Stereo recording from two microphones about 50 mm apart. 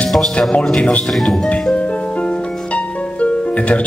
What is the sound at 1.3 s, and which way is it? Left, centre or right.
Speech, left.